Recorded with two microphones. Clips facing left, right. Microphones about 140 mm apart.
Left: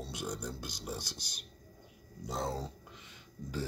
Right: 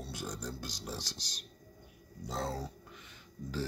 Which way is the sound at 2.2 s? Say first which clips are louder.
Left 1 dB; 15° left (ahead or behind).